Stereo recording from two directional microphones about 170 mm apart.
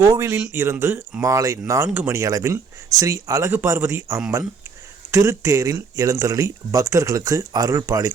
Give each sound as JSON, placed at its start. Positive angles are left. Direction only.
{"t": 0.0, "sound": "speech", "side_deg": -20}